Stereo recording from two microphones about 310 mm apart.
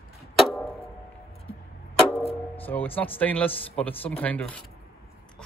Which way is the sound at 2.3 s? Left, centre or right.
Centre.